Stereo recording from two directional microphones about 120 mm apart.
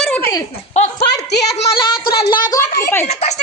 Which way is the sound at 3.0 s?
70° left (ahead or behind).